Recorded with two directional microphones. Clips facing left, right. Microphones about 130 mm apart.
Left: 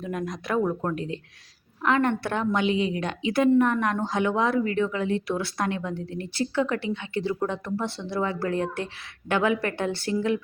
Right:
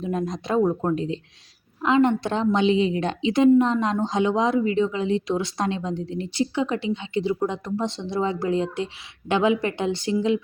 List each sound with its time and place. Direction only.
0.0 s speech: 25° right (ahead or behind)